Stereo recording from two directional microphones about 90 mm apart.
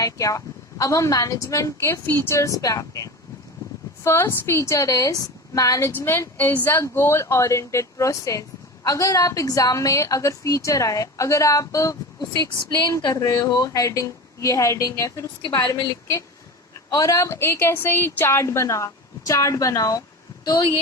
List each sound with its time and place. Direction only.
0.0 s a woman's voice: 40° left (ahead or behind)
4.0 s a woman's voice: 25° left (ahead or behind)
6.1 s a woman's voice: 25° left (ahead or behind); by 20.0 s 40° left (ahead or behind)
20.4 s speech: 50° left (ahead or behind)